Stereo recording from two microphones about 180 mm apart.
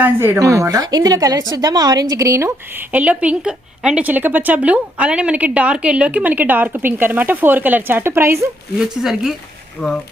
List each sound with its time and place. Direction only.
0.0 s a woman's voice: 10° right (ahead or behind)
8.8 s speech: centre (ahead or behind)